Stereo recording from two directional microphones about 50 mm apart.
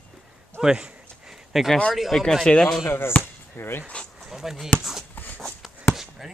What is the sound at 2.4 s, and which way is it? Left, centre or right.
Speech, centre.